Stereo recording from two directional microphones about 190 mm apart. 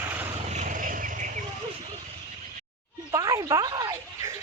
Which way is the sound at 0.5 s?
40° right (ahead or behind).